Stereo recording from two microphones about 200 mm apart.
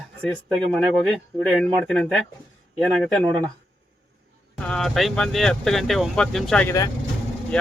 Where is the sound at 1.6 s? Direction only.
5° left (ahead or behind).